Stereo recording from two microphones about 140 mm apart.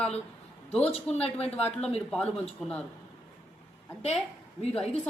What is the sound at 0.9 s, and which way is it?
Speech, 45° left (ahead or behind).